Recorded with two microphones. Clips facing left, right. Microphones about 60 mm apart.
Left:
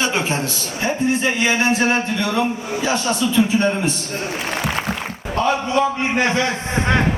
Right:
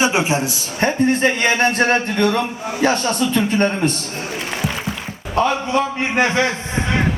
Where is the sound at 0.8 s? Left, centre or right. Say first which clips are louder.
Right 4 dB; right.